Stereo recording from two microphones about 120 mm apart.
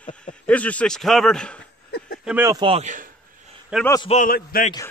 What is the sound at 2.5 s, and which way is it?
Speech, 45° right (ahead or behind).